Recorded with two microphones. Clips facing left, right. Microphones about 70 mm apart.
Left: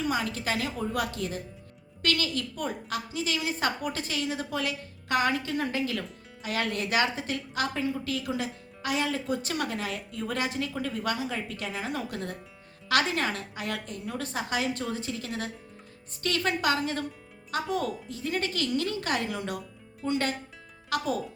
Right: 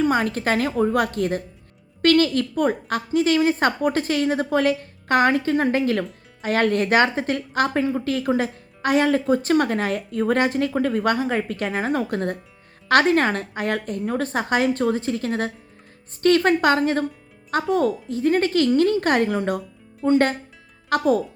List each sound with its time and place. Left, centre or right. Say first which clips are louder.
0.0 s a woman's voice: right 9 dB; right